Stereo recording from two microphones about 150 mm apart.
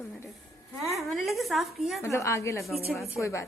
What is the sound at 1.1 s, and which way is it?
Speech, centre (ahead or behind).